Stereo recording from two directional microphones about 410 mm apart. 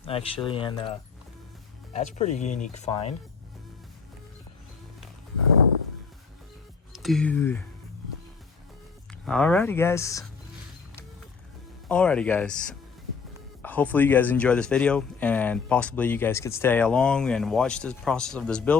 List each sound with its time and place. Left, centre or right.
0.0 s speech: centre
6.9 s speech: centre
9.2 s speech: centre
11.9 s speech: centre
13.6 s speech: centre